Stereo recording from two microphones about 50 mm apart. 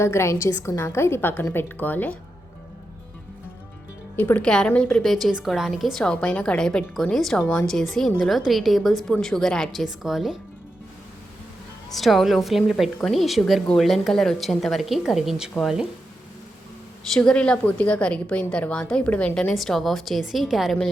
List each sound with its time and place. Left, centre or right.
0.0 s a woman's voice: left
0.6 s a woman's voice: left
4.2 s a woman's voice: left
4.4 s a woman's voice: centre
5.0 s a woman's voice: centre
6.0 s a woman's voice: centre
6.9 s a woman's voice: centre
9.7 s a woman's voice: centre
11.9 s a woman's voice: centre
17.3 s a woman's voice: left
19.0 s a woman's voice: left
19.5 s a woman's voice: centre